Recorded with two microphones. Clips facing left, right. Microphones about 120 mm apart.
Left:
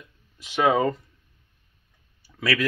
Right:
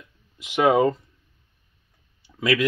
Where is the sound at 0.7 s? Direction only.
25° right (ahead or behind).